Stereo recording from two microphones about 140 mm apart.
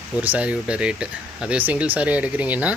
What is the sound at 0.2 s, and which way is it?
Speech, 10° right (ahead or behind).